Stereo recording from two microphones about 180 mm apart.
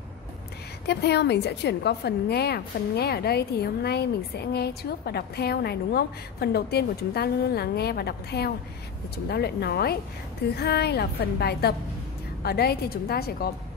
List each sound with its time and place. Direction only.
0.8 s a woman's voice: 70° left (ahead or behind)